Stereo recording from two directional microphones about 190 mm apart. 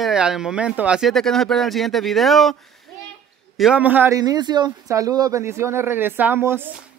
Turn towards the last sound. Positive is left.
turn(degrees=-10)  # may be behind; listen again after turning